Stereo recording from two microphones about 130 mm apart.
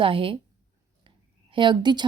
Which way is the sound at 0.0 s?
45° right (ahead or behind).